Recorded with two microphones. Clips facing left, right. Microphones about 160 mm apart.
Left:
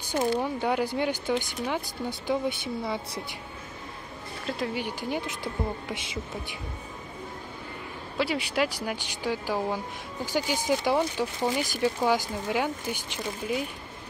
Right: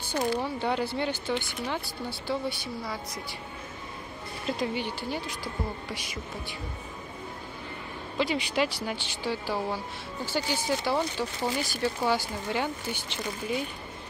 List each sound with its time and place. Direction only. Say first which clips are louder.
0.1 s speech: left 2 dB; 20° left (ahead or behind)
4.5 s speech: right 1 dB; 5° left (ahead or behind)
5.2 s speech: left 3 dB; 20° left (ahead or behind)
8.2 s speech: even; 5° left (ahead or behind)